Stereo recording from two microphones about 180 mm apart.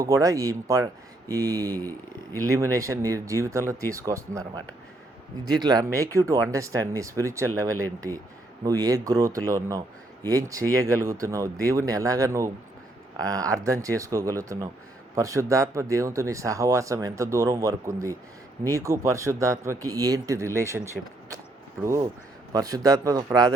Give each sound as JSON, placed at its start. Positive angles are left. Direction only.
{"t": 0.0, "sound": "a man's voice", "side_deg": -20}
{"t": 5.5, "sound": "a man's voice", "side_deg": -20}